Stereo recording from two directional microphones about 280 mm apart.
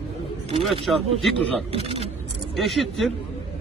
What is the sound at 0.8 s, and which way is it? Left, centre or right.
Speech, centre.